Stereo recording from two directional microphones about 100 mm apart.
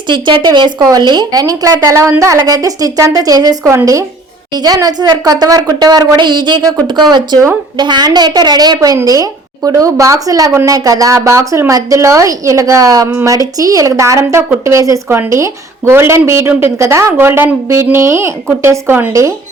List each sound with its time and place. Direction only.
0.1 s a woman's voice: 50° right (ahead or behind)
0.8 s a woman's voice: 40° right (ahead or behind); by 19.1 s 20° right (ahead or behind)